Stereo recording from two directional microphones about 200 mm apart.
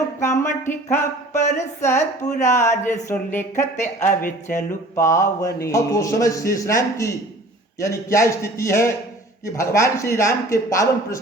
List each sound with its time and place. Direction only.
0.2 s a man's voice: 15° left (ahead or behind)
0.9 s speech: 35° left (ahead or behind)
2.6 s a man's voice: 15° left (ahead or behind)
3.5 s speech: 35° left (ahead or behind)
4.9 s a man's voice: 15° left (ahead or behind)